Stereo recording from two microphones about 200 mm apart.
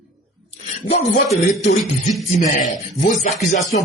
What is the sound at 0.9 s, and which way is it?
Speech, 30° left (ahead or behind).